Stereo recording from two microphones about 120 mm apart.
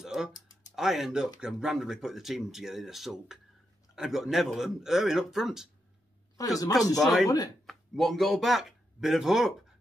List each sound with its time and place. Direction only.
0.0 s music: 5° right (ahead or behind)
0.7 s speech: 5° right (ahead or behind)
6.4 s speech: 30° left (ahead or behind)
7.0 s speech: centre (ahead or behind)
7.2 s speech: 30° left (ahead or behind)
7.6 s speech: centre (ahead or behind)